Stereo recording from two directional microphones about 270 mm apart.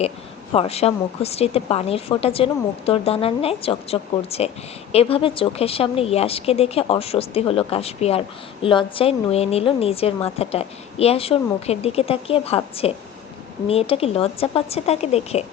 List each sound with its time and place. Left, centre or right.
0.5 s a woman's voice: left